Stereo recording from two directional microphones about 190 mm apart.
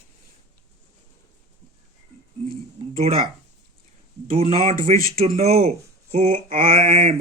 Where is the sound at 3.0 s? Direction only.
30° right (ahead or behind).